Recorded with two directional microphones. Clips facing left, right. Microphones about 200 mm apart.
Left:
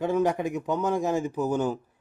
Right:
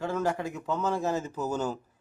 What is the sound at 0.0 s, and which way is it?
A man's voice, 15° left (ahead or behind).